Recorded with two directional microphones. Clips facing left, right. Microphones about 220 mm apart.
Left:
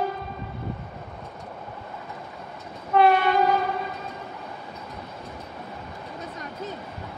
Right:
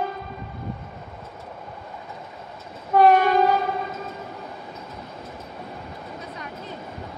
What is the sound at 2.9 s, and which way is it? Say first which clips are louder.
Train: right 3 dB; 45° right (ahead or behind).